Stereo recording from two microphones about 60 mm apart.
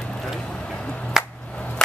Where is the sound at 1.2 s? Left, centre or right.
Centre.